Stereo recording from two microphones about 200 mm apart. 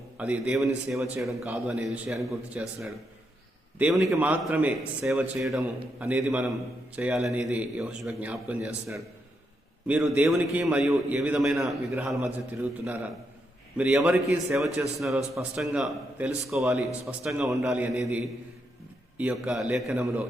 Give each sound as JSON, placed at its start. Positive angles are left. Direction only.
{"t": 0.2, "sound": "a man's voice", "side_deg": -5}
{"t": 9.8, "sound": "a man's voice", "side_deg": -5}
{"t": 19.1, "sound": "a man's voice", "side_deg": -5}